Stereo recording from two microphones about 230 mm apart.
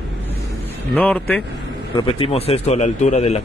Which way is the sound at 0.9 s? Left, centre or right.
Centre.